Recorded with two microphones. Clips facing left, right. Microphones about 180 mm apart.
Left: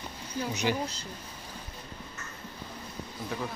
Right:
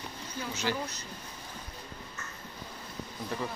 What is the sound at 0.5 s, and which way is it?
Speech, 15° left (ahead or behind).